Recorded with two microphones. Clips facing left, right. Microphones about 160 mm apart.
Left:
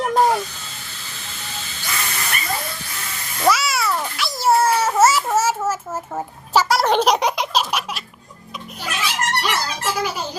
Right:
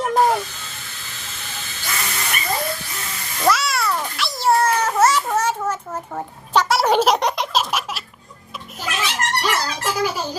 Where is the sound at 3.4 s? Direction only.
Centre (ahead or behind).